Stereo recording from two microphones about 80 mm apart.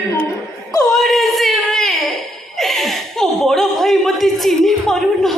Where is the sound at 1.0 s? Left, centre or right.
Centre.